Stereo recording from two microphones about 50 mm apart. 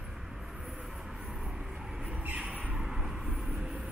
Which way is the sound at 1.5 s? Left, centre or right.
Centre.